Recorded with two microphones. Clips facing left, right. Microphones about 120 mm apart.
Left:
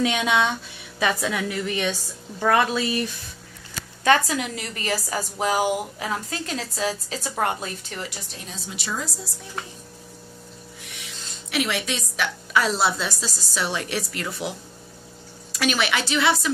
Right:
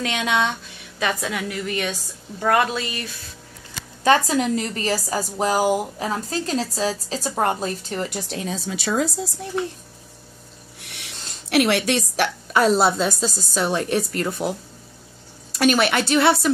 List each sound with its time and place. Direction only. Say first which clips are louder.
0.0 s a woman's voice: left 1 dB; 10° left (ahead or behind)
4.0 s a woman's voice: right 3 dB; 30° right (ahead or behind)
8.3 s speech: right 10 dB; 90° right
10.8 s a woman's voice: right 4 dB; 65° right (ahead or behind); by 14.5 s 40° right (ahead or behind)
15.6 s a woman's voice: right 5 dB; 50° right (ahead or behind)